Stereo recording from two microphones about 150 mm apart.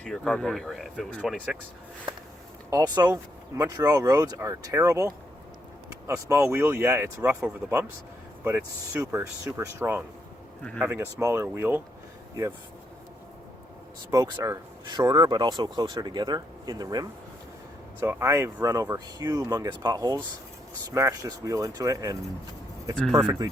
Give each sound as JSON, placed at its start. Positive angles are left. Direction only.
{"t": 0.0, "sound": "speech", "side_deg": 5}
{"t": 2.6, "sound": "speech", "side_deg": -25}
{"t": 14.1, "sound": "speech", "side_deg": -25}
{"t": 18.0, "sound": "speech", "side_deg": -15}
{"t": 23.0, "sound": "speech", "side_deg": 0}
{"t": 23.2, "sound": "speech", "side_deg": -15}